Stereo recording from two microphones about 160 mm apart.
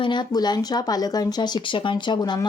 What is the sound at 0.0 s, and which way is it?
Speech, 30° left (ahead or behind).